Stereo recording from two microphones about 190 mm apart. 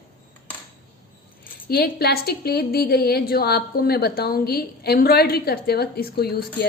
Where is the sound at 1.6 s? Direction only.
55° left (ahead or behind).